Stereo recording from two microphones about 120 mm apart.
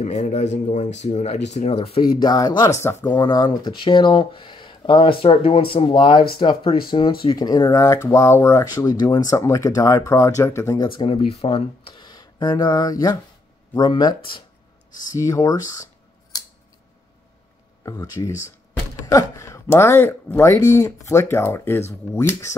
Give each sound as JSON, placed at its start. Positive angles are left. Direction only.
{"t": 0.0, "sound": "speech", "side_deg": 70}
{"t": 2.0, "sound": "speech", "side_deg": 35}
{"t": 3.3, "sound": "speech", "side_deg": 35}
{"t": 11.0, "sound": "speech", "side_deg": 50}
{"t": 15.0, "sound": "speech", "side_deg": 25}
{"t": 17.8, "sound": "speech", "side_deg": 30}